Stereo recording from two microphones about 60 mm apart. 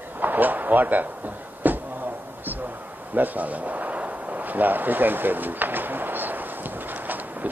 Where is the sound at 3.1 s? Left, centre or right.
Right.